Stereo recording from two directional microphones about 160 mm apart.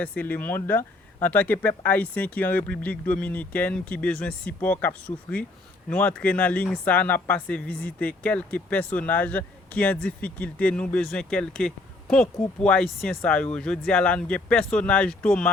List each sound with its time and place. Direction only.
0.0 s speech: 10° left (ahead or behind)